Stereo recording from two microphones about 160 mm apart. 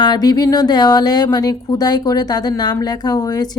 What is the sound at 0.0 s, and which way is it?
Speech, 25° left (ahead or behind).